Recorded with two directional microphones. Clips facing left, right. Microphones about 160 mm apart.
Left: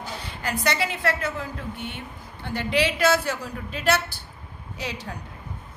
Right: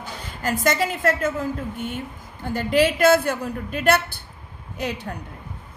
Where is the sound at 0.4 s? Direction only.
45° right (ahead or behind).